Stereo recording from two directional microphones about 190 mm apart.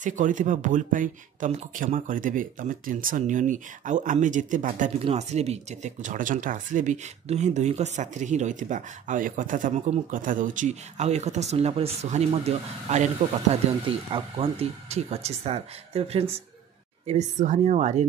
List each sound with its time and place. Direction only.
0.0 s speech: 40° right (ahead or behind)